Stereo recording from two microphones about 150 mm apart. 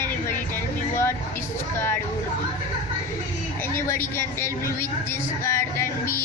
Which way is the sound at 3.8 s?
15° left (ahead or behind).